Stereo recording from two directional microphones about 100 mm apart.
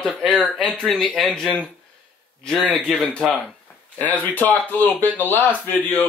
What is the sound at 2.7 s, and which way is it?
Speech, 5° left (ahead or behind).